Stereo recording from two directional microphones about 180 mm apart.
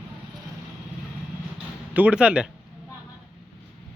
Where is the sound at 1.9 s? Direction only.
10° right (ahead or behind).